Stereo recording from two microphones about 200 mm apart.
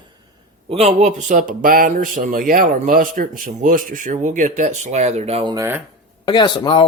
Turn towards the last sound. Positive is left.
turn(degrees=25)  # may be behind; listen again after turning